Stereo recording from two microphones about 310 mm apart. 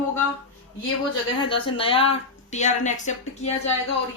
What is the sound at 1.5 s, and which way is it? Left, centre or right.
A woman's voice, centre.